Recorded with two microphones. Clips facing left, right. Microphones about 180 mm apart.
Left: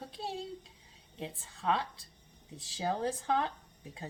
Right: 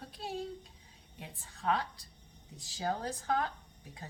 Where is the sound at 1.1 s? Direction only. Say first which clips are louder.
Left 7 dB; 25° left (ahead or behind).